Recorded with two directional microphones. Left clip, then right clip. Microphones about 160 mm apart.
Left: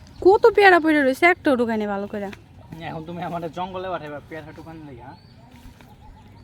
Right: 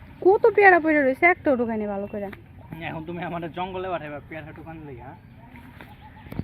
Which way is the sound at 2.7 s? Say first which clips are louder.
Left 1 dB; 45° left (ahead or behind).